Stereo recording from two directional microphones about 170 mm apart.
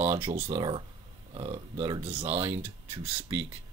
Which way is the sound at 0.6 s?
30° right (ahead or behind).